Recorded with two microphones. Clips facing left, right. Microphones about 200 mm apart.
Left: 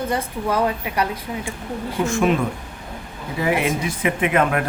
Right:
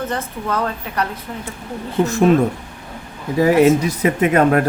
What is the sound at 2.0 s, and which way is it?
Speech, 40° right (ahead or behind).